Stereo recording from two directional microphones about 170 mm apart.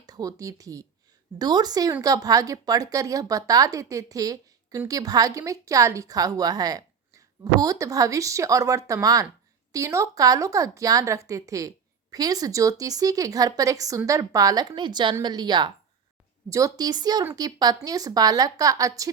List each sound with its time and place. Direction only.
0.0 s speech: 20° right (ahead or behind)